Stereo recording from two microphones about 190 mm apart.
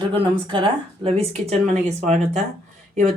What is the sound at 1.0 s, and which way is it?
Speech, 30° right (ahead or behind).